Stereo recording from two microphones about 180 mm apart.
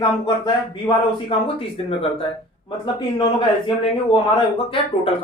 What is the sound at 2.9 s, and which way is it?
A man's voice, 25° left (ahead or behind).